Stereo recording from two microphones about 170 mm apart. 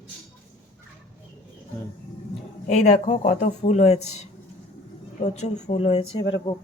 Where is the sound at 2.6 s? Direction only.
45° left (ahead or behind).